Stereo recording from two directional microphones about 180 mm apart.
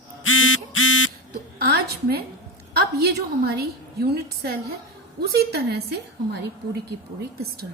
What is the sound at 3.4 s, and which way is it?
A woman's voice, 60° right (ahead or behind).